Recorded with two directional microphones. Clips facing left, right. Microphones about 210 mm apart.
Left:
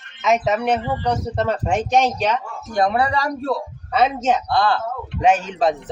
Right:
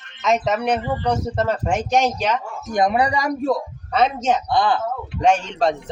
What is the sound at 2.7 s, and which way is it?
Speech, 15° right (ahead or behind).